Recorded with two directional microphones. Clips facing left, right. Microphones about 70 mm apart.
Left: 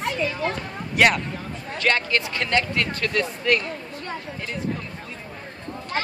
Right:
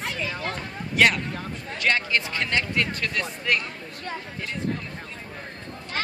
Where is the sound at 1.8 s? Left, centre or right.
Centre.